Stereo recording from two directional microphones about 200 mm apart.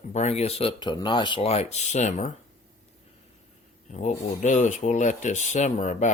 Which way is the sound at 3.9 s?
35° left (ahead or behind).